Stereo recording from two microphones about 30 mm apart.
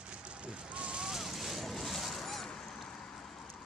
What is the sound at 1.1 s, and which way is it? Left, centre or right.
Boat, centre.